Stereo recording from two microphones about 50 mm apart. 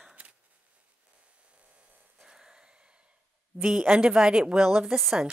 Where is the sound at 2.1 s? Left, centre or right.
Centre.